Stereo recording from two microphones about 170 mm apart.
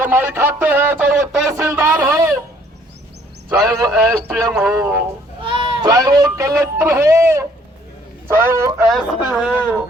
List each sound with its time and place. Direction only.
0.0 s speech: 10° right (ahead or behind)
3.8 s speech: 5° right (ahead or behind)
5.4 s a man's voice: 30° right (ahead or behind); by 8.7 s 15° right (ahead or behind)
8.9 s speech: centre (ahead or behind)